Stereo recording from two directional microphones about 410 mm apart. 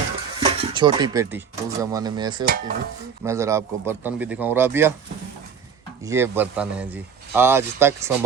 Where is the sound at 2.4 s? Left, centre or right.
Right.